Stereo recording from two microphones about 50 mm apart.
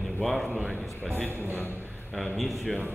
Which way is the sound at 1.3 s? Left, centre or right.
Right.